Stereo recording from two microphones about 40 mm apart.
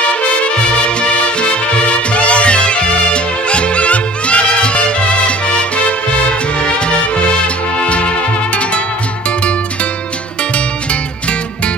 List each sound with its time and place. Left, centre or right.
0.4 s music: left